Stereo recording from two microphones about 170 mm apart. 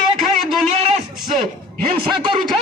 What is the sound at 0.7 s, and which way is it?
Speech, 35° right (ahead or behind).